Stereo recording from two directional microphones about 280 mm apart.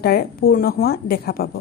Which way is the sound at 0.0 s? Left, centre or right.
Left.